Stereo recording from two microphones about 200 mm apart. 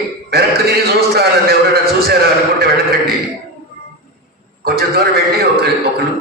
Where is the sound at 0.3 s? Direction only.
50° right (ahead or behind).